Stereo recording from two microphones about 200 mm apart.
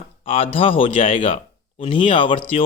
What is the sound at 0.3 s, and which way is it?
A man's voice, 30° left (ahead or behind).